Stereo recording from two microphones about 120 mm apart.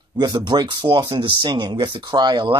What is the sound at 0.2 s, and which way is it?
Speech, 40° right (ahead or behind).